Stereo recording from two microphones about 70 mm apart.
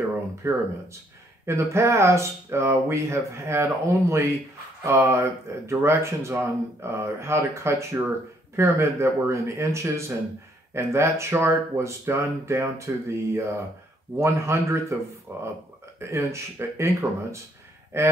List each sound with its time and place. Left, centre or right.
0.4 s speech: right